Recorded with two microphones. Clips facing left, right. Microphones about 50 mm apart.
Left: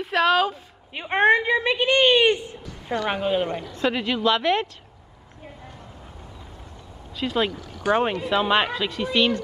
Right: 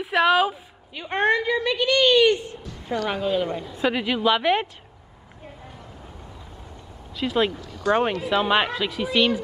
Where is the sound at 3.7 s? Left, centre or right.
Centre.